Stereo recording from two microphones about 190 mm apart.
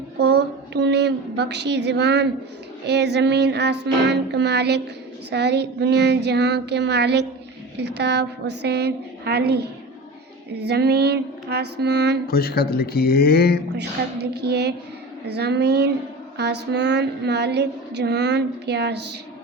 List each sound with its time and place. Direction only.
0.2 s female singing: 60° right (ahead or behind)
10.7 s female singing: 60° right (ahead or behind)
12.3 s speech: 55° left (ahead or behind)
13.7 s female singing: 60° right (ahead or behind)